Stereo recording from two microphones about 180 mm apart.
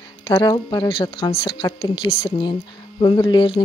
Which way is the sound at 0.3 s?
25° left (ahead or behind).